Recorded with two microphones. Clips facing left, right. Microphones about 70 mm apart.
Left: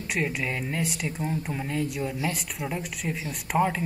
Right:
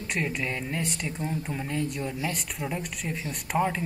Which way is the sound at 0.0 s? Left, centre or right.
Centre.